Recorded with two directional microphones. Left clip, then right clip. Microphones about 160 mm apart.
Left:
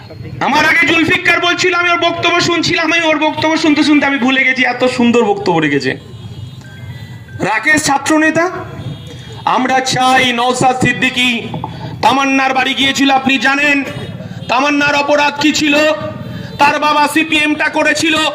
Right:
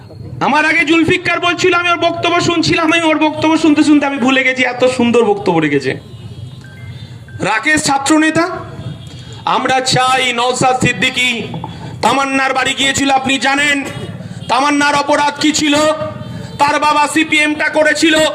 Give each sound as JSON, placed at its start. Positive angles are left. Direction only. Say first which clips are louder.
{"t": 0.3, "sound": "a man's voice", "louder": "left 1 dB", "side_deg": 40}
{"t": 7.3, "sound": "a man's voice", "louder": "left 1 dB", "side_deg": 60}